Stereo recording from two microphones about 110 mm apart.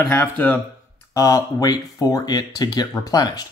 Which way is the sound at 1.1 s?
30° left (ahead or behind).